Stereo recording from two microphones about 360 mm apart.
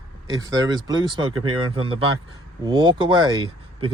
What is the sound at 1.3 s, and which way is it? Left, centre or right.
Speech, right.